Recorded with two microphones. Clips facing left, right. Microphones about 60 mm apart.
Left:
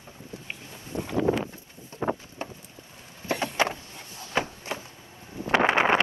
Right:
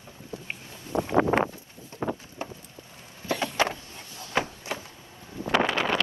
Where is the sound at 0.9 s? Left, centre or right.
Right.